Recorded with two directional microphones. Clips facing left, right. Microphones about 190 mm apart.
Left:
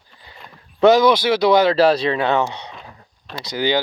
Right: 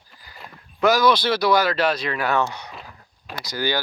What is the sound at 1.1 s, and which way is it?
Speech, 10° left (ahead or behind).